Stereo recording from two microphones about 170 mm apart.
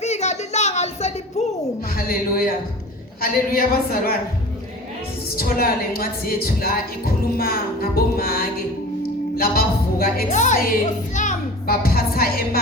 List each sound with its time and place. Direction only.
0.0 s a sound: 40° left (ahead or behind)
2.0 s a woman's voice: 60° left (ahead or behind)
5.4 s a woman's voice: 60° left (ahead or behind)
10.2 s speech: 45° left (ahead or behind); by 12.3 s 60° left (ahead or behind)